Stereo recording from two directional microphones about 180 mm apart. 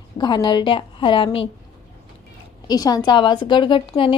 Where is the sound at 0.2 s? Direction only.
25° left (ahead or behind).